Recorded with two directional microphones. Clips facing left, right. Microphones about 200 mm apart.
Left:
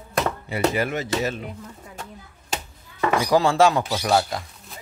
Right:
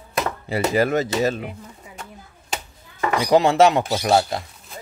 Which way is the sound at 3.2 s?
20° right (ahead or behind).